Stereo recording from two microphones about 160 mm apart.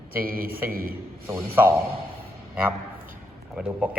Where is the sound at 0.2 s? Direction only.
65° right (ahead or behind).